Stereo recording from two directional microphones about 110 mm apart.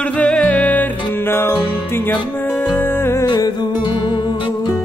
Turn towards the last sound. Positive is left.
turn(degrees=45)  # may be behind; listen again after turning